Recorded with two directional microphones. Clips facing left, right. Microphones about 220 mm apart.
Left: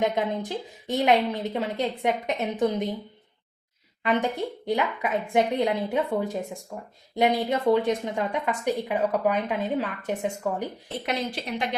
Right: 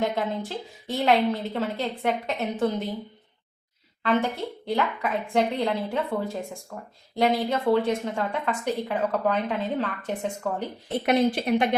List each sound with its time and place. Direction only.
0.0 s a woman's voice: 15° left (ahead or behind)
4.0 s a woman's voice: 15° left (ahead or behind)
11.0 s speech: 55° right (ahead or behind)